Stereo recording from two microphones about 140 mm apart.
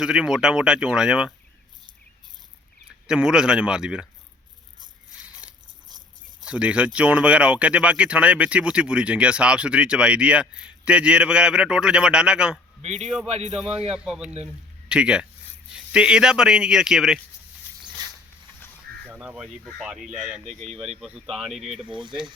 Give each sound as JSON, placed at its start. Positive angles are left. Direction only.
{"t": 0.0, "sound": "speech", "side_deg": -5}
{"t": 3.1, "sound": "speech", "side_deg": -5}
{"t": 5.2, "sound": "biting", "side_deg": -10}
{"t": 6.4, "sound": "speech", "side_deg": -10}
{"t": 12.8, "sound": "a man's voice", "side_deg": -55}
{"t": 13.7, "sound": "speech", "side_deg": -5}
{"t": 17.8, "sound": "zipper", "side_deg": -25}
{"t": 19.0, "sound": "a sound", "side_deg": -10}
{"t": 19.8, "sound": "speech", "side_deg": -5}
{"t": 21.8, "sound": "speech", "side_deg": -35}